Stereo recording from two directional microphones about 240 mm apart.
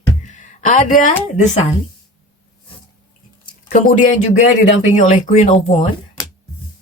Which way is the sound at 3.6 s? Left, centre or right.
Left.